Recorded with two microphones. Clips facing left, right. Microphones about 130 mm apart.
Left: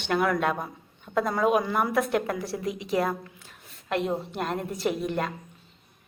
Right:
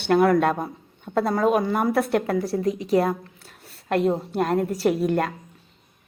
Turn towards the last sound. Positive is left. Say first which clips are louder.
# right 6 dB
turn(degrees=-45)  # may be behind; listen again after turning